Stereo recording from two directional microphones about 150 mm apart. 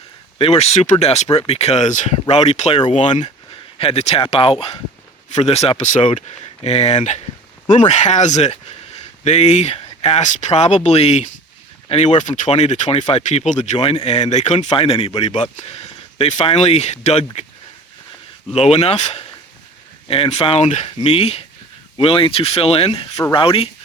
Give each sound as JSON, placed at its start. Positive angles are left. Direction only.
{"t": 0.3, "sound": "speech", "side_deg": 45}
{"t": 3.8, "sound": "speech", "side_deg": 40}
{"t": 18.5, "sound": "speech", "side_deg": 45}